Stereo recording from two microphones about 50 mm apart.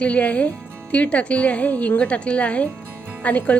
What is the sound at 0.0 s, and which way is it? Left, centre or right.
Speech, left.